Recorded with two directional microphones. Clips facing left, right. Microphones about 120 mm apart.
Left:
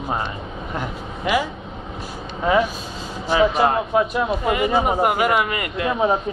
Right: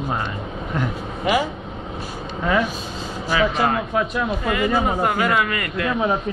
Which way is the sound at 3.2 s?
25° left (ahead or behind).